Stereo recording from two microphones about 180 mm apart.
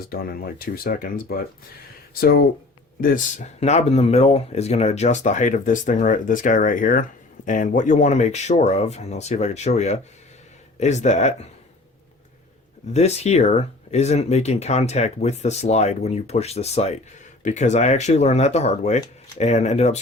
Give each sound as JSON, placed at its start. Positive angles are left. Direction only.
{"t": 0.1, "sound": "speech", "side_deg": 55}
{"t": 3.0, "sound": "speech", "side_deg": 50}
{"t": 12.9, "sound": "speech", "side_deg": 35}